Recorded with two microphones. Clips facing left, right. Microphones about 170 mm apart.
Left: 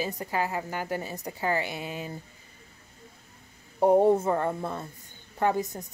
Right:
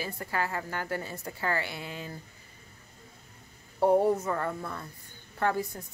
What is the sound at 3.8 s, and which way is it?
Speech, 20° left (ahead or behind).